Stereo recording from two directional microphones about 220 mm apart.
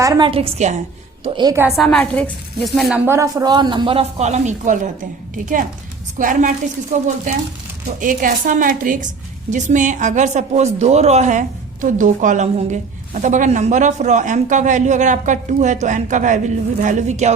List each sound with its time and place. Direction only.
0.0 s speech: 20° right (ahead or behind)
1.2 s speech: 20° right (ahead or behind)
1.7 s a woman's voice: centre (ahead or behind)
2.9 s a woman's voice: 10° right (ahead or behind); by 17.3 s 30° right (ahead or behind)